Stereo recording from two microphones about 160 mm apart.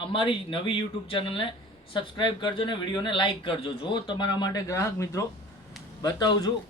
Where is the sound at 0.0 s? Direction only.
35° left (ahead or behind).